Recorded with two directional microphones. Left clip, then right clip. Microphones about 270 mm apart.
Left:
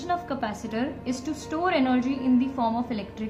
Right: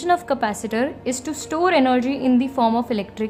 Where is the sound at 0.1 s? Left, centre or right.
Right.